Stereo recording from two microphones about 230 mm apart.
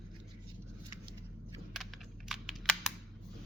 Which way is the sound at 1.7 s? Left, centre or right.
Centre.